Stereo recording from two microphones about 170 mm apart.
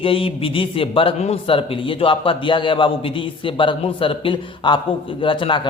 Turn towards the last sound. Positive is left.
turn(degrees=30)  # may be behind; listen again after turning